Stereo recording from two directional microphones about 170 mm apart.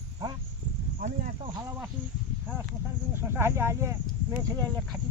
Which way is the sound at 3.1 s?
15° right (ahead or behind).